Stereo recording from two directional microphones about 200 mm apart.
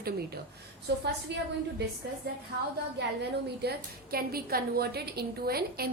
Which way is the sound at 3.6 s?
50° right (ahead or behind).